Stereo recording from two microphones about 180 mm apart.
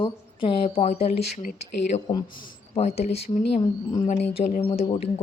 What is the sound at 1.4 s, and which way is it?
Speech, 50° left (ahead or behind).